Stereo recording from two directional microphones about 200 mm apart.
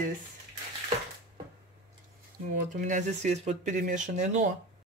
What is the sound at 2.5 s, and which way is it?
Speech, 45° right (ahead or behind).